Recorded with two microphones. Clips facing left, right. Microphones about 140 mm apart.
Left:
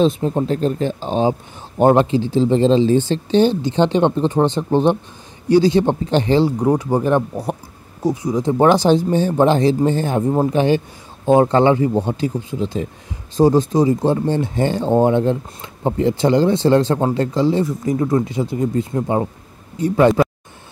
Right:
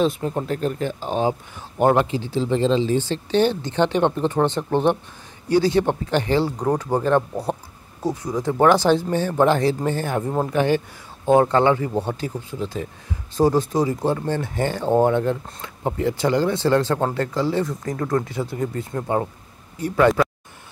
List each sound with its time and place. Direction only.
0.0 s speech: 25° left (ahead or behind)
3.1 s speech: 20° left (ahead or behind)
6.6 s speech: 10° left (ahead or behind)